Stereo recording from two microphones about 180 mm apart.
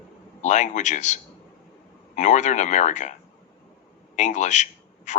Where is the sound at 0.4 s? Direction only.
40° left (ahead or behind).